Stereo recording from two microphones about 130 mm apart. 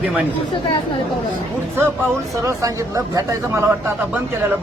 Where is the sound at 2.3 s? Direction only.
25° right (ahead or behind).